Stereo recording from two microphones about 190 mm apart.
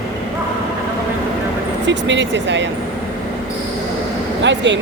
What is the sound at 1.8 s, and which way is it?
Speech, 70° right (ahead or behind).